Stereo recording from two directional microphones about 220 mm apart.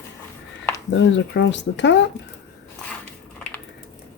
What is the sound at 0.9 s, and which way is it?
Speech, 55° left (ahead or behind).